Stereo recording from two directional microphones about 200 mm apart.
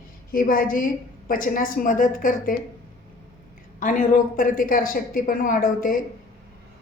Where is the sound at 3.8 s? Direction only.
40° left (ahead or behind).